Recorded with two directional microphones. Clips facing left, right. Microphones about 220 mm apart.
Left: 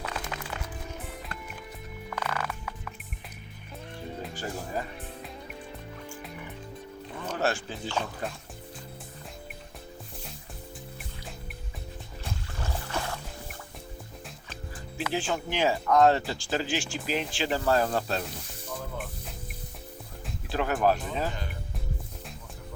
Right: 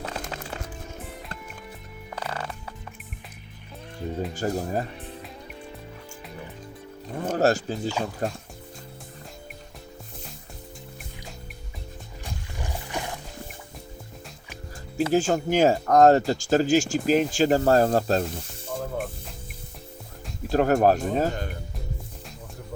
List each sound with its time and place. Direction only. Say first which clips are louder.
0.0 s music: right 2 dB; 35° right (ahead or behind)
2.1 s music: even; 30° right (ahead or behind)
4.4 s speech: right 7 dB; 40° right (ahead or behind)
7.1 s music: right 8 dB; 45° right (ahead or behind)
8.2 s speech: right 7 dB; 40° right (ahead or behind)
12.2 s music: right 1 dB; 15° right (ahead or behind)
14.9 s speech: right 9 dB; 45° right (ahead or behind)
18.8 s music: right 9 dB; 45° right (ahead or behind)
20.5 s speech: right 6 dB; 45° right (ahead or behind)